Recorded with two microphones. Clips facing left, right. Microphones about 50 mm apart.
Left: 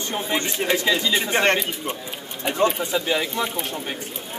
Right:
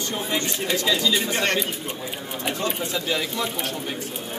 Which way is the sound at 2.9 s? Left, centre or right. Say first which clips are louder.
Left 3 dB; centre.